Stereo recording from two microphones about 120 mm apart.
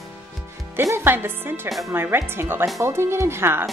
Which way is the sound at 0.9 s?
20° right (ahead or behind).